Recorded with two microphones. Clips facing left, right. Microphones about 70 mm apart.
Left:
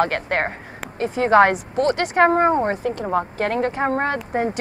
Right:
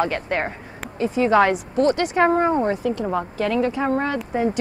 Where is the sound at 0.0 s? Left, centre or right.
Left.